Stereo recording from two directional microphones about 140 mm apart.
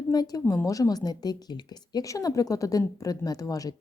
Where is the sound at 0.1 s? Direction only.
25° left (ahead or behind).